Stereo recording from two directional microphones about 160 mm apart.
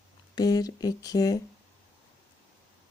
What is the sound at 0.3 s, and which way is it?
Speech, 25° left (ahead or behind).